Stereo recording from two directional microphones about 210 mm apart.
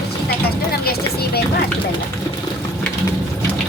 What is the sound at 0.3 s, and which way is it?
Vehicle, 50° left (ahead or behind).